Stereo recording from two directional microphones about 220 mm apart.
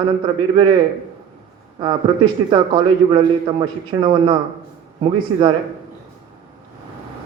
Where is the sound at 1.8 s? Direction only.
20° right (ahead or behind).